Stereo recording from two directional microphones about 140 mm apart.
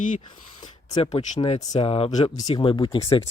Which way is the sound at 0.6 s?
30° left (ahead or behind).